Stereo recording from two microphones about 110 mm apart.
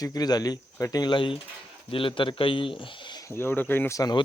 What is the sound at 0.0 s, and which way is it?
Speech, 35° left (ahead or behind).